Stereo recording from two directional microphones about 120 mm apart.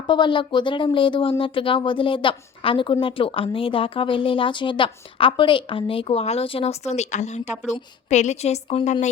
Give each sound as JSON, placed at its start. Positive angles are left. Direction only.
{"t": 0.1, "sound": "a woman's voice", "side_deg": 40}